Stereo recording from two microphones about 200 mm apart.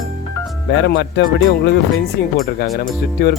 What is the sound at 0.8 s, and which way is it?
Speech, 60° left (ahead or behind).